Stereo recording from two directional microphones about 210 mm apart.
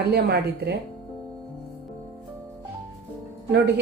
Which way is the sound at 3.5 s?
55° right (ahead or behind).